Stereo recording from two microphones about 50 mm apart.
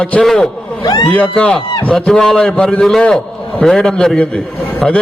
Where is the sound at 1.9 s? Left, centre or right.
Centre.